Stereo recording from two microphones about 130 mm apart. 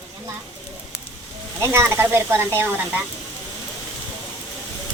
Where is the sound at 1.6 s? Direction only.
20° right (ahead or behind).